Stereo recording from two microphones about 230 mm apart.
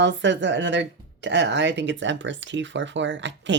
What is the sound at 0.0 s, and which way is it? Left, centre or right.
Speech, right.